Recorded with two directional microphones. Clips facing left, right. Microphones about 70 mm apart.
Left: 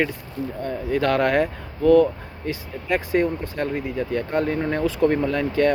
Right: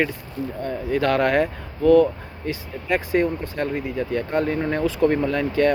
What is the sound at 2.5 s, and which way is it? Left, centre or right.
Speech, right.